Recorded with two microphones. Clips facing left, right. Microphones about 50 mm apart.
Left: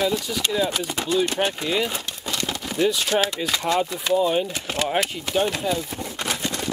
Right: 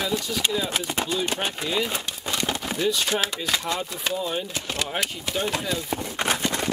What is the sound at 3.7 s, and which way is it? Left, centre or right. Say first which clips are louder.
Speech: left 6 dB; centre.